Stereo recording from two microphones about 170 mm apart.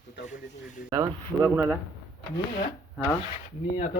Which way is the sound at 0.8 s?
20° right (ahead or behind).